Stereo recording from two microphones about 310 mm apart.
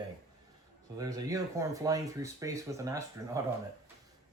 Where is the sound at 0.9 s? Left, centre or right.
Centre.